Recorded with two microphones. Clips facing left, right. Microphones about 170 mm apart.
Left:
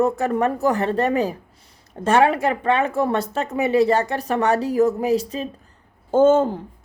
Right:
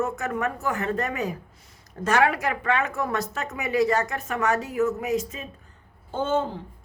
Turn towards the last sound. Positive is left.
turn(degrees=45)  # may be behind; listen again after turning